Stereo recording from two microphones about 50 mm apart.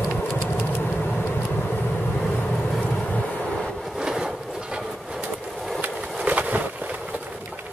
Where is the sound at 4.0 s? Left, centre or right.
Centre.